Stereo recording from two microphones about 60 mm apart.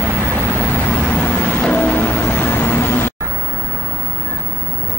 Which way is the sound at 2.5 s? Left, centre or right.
Left.